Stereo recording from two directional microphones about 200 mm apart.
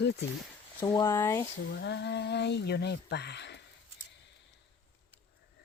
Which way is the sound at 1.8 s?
60° left (ahead or behind).